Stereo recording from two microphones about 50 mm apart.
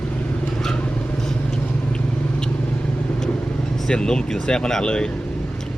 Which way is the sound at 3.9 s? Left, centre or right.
Centre.